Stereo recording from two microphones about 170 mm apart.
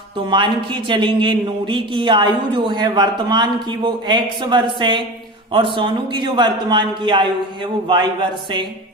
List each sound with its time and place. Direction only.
0.2 s speech: 25° right (ahead or behind)